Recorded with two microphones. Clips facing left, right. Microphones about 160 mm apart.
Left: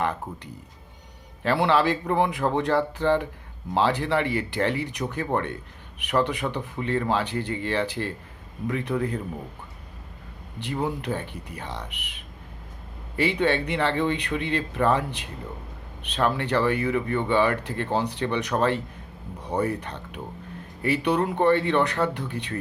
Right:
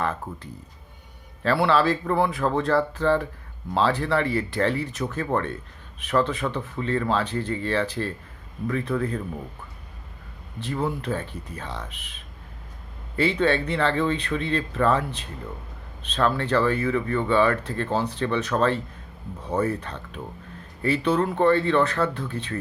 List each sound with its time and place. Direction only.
1.5 s speech: 20° left (ahead or behind)
10.6 s speech: 20° left (ahead or behind)